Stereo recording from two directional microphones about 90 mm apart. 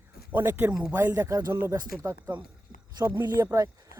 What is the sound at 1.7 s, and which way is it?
Speech, 50° right (ahead or behind).